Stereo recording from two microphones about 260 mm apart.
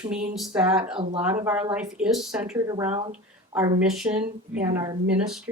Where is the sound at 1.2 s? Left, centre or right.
Centre.